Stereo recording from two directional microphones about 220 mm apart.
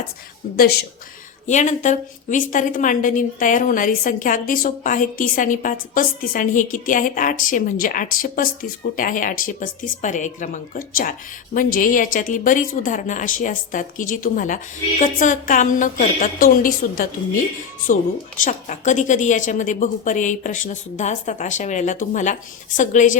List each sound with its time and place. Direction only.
1.5 s a woman's voice: 35° left (ahead or behind)
18.4 s a woman's voice: 35° left (ahead or behind)